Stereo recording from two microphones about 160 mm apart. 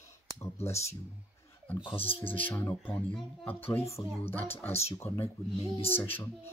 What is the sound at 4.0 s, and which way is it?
Speech, 30° left (ahead or behind).